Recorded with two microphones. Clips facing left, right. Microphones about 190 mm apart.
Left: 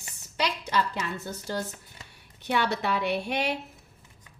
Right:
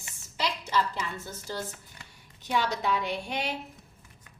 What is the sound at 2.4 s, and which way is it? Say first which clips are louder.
A woman's voice: left 2 dB; 65° left (ahead or behind).